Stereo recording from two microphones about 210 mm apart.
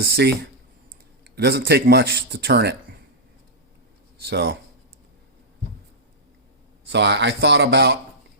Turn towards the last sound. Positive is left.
turn(degrees=-55)  # may be behind; listen again after turning